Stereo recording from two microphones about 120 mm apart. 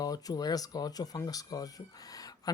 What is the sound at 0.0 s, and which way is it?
Speech, 30° left (ahead or behind).